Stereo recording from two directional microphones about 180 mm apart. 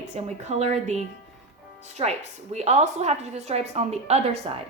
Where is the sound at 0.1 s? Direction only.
40° right (ahead or behind).